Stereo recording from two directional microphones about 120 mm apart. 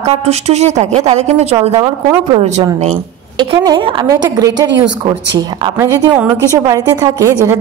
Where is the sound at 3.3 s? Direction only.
35° right (ahead or behind).